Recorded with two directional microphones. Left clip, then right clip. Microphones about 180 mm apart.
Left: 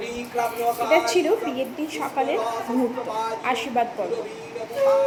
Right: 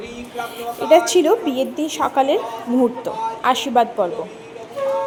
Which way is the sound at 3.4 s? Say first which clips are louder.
Right 10 dB; 55° right (ahead or behind).